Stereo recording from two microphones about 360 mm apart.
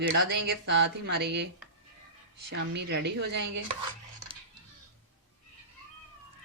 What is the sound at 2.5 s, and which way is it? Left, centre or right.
Speech, right.